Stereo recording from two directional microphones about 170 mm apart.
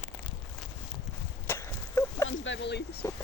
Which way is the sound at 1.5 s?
15° left (ahead or behind).